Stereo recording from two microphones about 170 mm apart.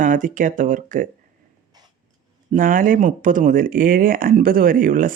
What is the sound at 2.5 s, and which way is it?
Speech, 55° right (ahead or behind).